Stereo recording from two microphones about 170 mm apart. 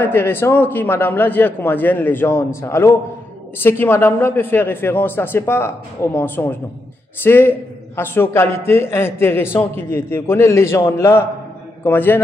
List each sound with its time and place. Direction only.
0.0 s a man's voice: 15° left (ahead or behind)